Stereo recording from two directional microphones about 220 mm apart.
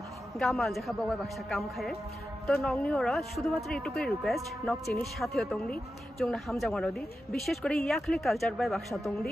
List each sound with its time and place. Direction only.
0.4 s speech: centre (ahead or behind)